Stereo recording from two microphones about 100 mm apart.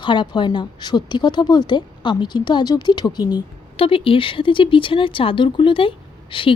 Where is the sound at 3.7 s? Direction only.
65° left (ahead or behind).